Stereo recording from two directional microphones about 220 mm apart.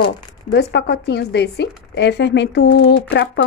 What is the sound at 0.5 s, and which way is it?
Speech, 50° left (ahead or behind).